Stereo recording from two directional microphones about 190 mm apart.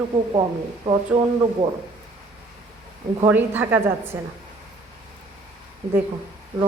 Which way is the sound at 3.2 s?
10° right (ahead or behind).